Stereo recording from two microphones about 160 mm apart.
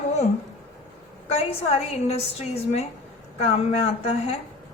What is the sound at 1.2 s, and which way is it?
A woman's voice, 40° left (ahead or behind).